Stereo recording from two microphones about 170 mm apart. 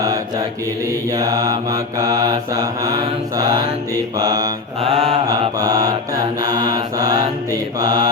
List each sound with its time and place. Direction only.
0.9 s mantra: 20° right (ahead or behind)
4.8 s mantra: 35° right (ahead or behind)
5.3 s mantra: 20° right (ahead or behind)